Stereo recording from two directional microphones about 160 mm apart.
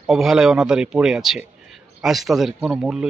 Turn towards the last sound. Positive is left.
turn(degrees=-5)  # may be behind; listen again after turning